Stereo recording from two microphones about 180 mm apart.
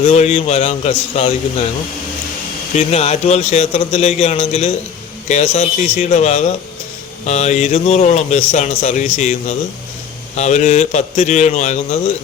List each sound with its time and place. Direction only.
0.0 s a man's voice: 40° left (ahead or behind)
2.7 s a man's voice: 35° left (ahead or behind)